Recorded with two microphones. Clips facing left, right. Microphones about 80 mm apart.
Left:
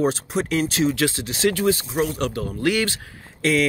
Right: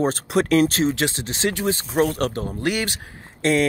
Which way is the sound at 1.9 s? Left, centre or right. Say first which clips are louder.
Right 3 dB; right.